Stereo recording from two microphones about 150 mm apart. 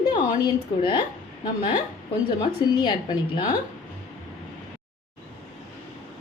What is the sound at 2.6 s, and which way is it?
Speech, 30° left (ahead or behind).